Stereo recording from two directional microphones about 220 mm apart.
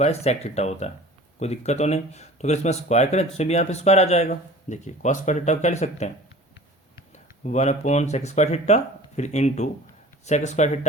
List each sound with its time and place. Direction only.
0.0 s speech: 30° left (ahead or behind)
7.1 s speech: 30° left (ahead or behind)